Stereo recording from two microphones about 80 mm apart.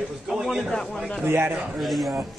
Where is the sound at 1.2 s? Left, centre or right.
Right.